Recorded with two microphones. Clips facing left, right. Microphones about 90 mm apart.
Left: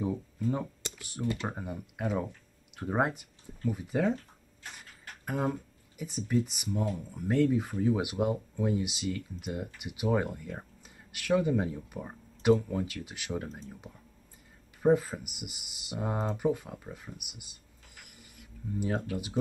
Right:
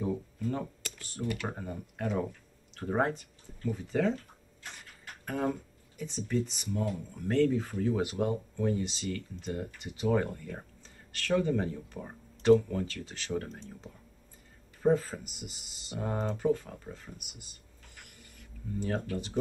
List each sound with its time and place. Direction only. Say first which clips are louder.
0.0 s a sound: left 1 dB; 10° left (ahead or behind)
0.9 s speech: left 1 dB; 10° left (ahead or behind)
1.2 s speech: left 1 dB; 25° left (ahead or behind)
1.5 s speech: left 1 dB; 10° left (ahead or behind)
5.2 s speech: even; 10° left (ahead or behind)
18.0 s a sound: even; 5° left (ahead or behind)